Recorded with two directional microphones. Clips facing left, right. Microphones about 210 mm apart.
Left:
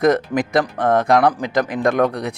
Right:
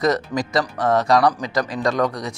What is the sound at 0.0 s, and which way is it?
Speech, 55° left (ahead or behind).